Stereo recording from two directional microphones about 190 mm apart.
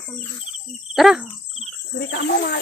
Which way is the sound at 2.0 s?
65° left (ahead or behind).